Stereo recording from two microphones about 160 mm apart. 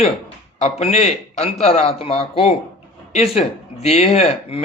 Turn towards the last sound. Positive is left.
turn(degrees=40)  # may be behind; listen again after turning